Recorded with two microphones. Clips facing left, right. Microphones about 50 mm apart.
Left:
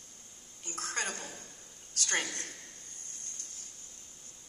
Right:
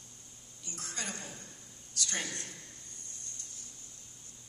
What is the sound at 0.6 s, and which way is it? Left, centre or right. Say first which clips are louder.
A man's voice: left 5 dB; left.